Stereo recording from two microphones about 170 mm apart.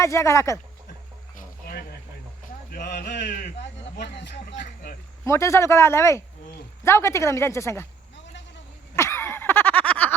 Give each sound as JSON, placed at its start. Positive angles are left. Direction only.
{"t": 0.0, "sound": "speech", "side_deg": 15}
{"t": 1.4, "sound": "cricket", "side_deg": 60}
{"t": 2.7, "sound": "speech", "side_deg": 80}
{"t": 4.5, "sound": "speech", "side_deg": 55}
{"t": 5.2, "sound": "speech", "side_deg": 15}
{"t": 9.0, "sound": "a sound", "side_deg": 15}